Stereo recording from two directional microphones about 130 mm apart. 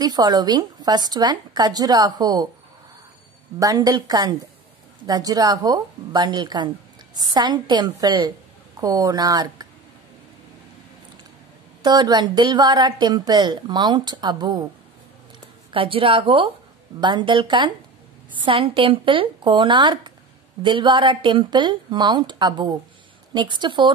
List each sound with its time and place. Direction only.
0.0 s a woman's voice: 30° right (ahead or behind)
3.5 s a woman's voice: 30° right (ahead or behind)
11.8 s a woman's voice: 35° right (ahead or behind)
15.7 s a woman's voice: 45° right (ahead or behind)